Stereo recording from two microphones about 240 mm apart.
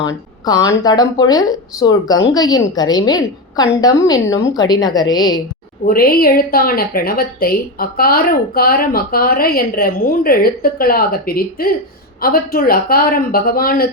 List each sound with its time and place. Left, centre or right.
0.0 s a woman's voice: centre
5.9 s a woman's voice: left